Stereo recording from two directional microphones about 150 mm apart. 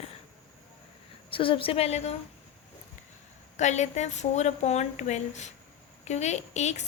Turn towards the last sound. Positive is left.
turn(degrees=50)  # may be behind; listen again after turning